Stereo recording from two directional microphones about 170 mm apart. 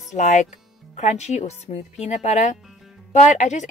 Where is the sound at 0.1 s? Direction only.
45° left (ahead or behind).